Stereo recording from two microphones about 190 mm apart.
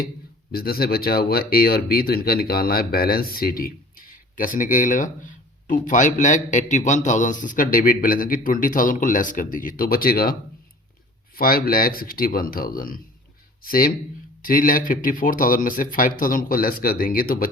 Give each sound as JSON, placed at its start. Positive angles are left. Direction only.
{"t": 0.5, "sound": "speech", "side_deg": 50}
{"t": 11.3, "sound": "speech", "side_deg": 50}